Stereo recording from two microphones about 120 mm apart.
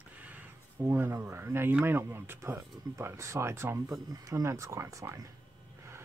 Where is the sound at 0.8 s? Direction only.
20° right (ahead or behind).